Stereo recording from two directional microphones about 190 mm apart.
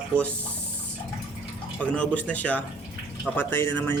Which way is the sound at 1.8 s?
5° left (ahead or behind).